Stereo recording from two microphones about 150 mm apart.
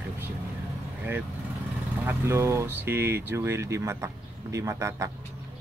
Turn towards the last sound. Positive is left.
turn(degrees=-20)  # may be behind; listen again after turning